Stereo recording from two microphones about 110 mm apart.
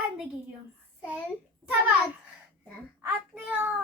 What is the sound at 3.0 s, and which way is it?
Speech, 15° right (ahead or behind).